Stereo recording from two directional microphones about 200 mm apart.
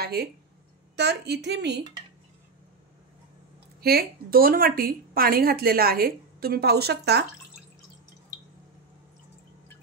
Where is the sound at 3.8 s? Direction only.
50° right (ahead or behind).